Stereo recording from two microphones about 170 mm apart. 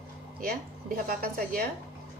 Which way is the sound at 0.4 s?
60° right (ahead or behind).